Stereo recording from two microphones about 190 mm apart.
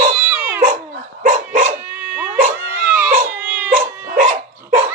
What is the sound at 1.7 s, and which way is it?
Dog, 10° right (ahead or behind).